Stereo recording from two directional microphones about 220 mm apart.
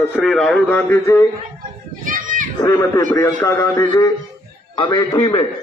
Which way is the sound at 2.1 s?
35° right (ahead or behind).